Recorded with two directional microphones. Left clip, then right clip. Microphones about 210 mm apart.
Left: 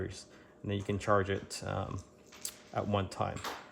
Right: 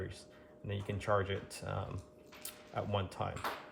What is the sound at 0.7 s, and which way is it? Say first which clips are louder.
Speech: left 4 dB; 50° left (ahead or behind).